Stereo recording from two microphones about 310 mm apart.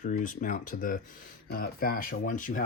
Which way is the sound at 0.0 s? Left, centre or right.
Left.